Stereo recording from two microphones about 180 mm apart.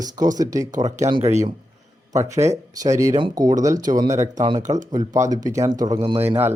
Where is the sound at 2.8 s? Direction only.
20° right (ahead or behind).